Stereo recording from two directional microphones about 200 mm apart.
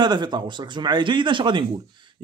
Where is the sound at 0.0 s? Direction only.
20° right (ahead or behind).